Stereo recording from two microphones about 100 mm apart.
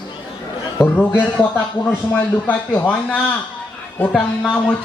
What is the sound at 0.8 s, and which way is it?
A man's voice, 20° left (ahead or behind).